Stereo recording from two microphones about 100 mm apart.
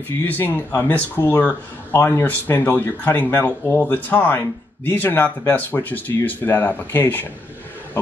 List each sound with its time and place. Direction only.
0.2 s speech: 20° left (ahead or behind)